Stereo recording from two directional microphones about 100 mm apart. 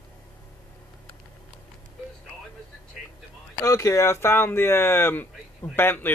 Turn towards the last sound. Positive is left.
turn(degrees=20)  # may be behind; listen again after turning